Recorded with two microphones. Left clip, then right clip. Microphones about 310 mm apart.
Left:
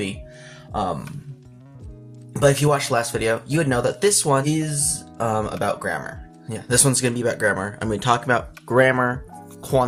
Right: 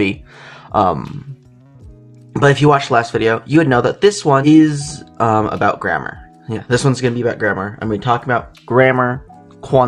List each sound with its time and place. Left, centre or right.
0.0 s music: left
2.3 s speech: left
4.4 s speech: left